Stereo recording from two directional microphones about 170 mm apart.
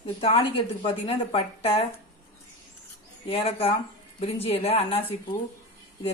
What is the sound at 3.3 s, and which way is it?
A woman's voice, 35° left (ahead or behind).